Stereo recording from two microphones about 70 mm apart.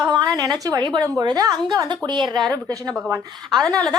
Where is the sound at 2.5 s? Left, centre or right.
Right.